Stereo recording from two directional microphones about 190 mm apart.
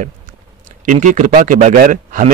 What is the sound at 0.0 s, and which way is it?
A man's voice, 45° right (ahead or behind).